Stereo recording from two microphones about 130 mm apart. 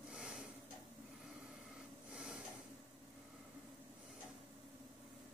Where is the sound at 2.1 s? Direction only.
5° right (ahead or behind).